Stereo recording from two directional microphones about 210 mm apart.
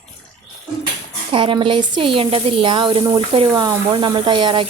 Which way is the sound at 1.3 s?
25° right (ahead or behind).